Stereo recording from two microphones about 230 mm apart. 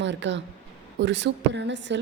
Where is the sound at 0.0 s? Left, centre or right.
Right.